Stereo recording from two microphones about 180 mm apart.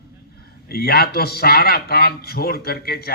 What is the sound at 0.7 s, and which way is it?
A man's voice, 60° left (ahead or behind).